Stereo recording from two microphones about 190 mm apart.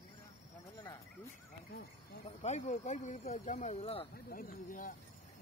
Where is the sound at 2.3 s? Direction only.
35° left (ahead or behind).